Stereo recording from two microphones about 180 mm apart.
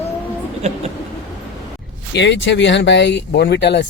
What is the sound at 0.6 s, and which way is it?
Speech, 35° right (ahead or behind).